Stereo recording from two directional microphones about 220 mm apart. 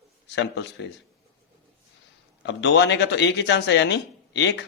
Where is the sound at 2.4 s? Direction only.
55° left (ahead or behind).